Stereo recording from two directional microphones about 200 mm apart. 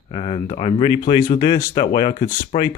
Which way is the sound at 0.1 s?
30° left (ahead or behind).